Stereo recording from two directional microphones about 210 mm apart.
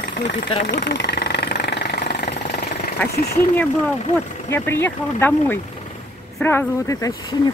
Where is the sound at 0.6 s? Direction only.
55° left (ahead or behind).